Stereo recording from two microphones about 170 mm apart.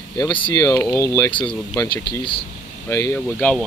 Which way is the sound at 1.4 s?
5° left (ahead or behind).